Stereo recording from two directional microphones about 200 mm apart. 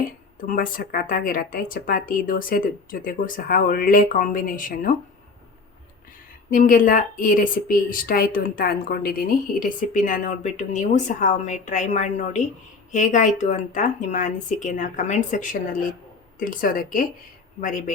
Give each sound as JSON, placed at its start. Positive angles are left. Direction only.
{"t": 0.4, "sound": "speech", "side_deg": 45}
{"t": 6.5, "sound": "speech", "side_deg": 40}